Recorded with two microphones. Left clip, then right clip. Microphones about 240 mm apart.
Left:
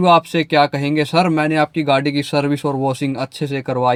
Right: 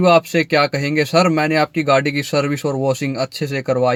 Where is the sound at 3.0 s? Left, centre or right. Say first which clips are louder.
Right 1 dB; centre.